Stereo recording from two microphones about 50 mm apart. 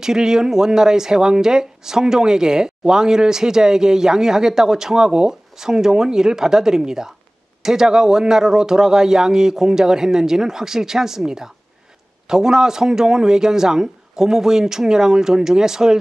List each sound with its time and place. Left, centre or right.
0.0 s speech: centre